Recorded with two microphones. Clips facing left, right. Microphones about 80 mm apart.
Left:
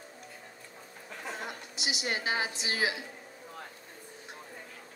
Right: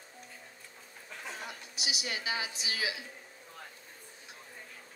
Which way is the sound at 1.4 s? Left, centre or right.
Left.